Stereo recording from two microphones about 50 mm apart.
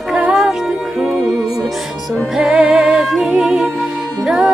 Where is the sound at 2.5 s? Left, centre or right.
Right.